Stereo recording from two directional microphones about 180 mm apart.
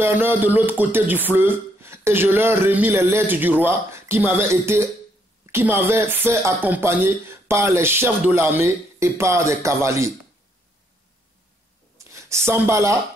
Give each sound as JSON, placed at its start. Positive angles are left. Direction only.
{"t": 0.0, "sound": "speech", "side_deg": -10}
{"t": 12.0, "sound": "speech", "side_deg": -15}